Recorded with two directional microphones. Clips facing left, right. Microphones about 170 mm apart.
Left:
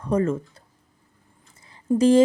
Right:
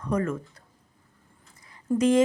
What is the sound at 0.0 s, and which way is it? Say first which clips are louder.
Speech: left 5 dB; 30° left (ahead or behind).